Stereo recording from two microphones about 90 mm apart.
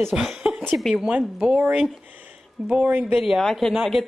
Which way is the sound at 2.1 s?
15° right (ahead or behind).